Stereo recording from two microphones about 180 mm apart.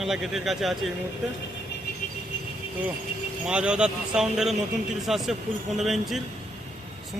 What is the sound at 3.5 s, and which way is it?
Speech, 5° right (ahead or behind).